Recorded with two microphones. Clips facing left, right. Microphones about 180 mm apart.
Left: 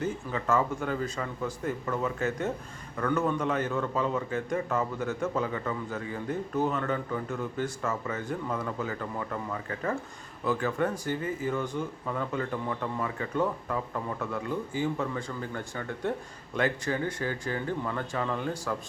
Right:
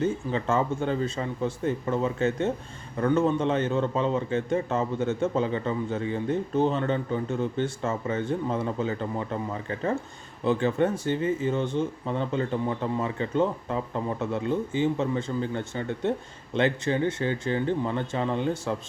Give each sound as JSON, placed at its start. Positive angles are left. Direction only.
{"t": 0.0, "sound": "a man's voice", "side_deg": -25}